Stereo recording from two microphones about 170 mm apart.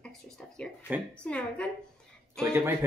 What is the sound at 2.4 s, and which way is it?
Speech, 15° right (ahead or behind).